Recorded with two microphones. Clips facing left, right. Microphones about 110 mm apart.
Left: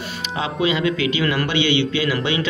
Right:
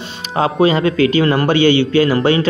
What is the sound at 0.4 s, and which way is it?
A man's voice, 45° right (ahead or behind).